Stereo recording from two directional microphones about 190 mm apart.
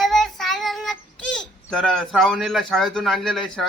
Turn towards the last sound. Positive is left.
turn(degrees=0)  # may be behind; listen again after turning